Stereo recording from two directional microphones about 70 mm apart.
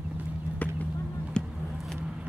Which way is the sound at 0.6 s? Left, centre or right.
Left.